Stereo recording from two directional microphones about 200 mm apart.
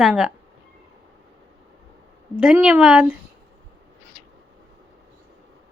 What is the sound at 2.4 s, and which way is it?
Speech, 5° right (ahead or behind).